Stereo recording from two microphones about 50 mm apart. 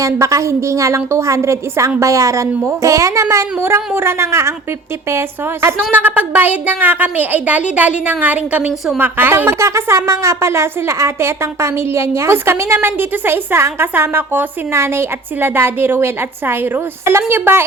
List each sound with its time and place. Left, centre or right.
0.0 s a woman's voice: right
2.0 s a woman's voice: right
3.6 s speech: right
5.9 s a woman's voice: right
9.0 s speech: right
9.6 s speech: right
14.7 s speech: right
17.1 s speech: right
17.3 s speech: right